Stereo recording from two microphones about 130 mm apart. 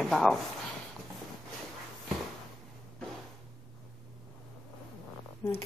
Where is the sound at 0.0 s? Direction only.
Centre (ahead or behind).